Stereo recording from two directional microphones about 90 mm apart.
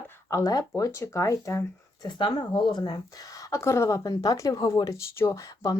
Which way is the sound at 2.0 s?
60° left (ahead or behind).